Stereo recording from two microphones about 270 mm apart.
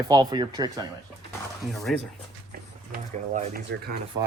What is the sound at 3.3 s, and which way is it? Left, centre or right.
Speech, right.